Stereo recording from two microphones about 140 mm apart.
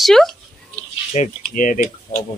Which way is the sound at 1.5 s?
70° left (ahead or behind).